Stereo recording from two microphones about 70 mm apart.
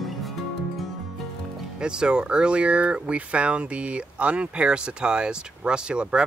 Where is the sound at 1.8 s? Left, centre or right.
Centre.